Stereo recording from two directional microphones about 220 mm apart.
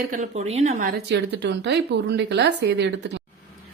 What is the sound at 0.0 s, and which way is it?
A woman's voice, 35° right (ahead or behind).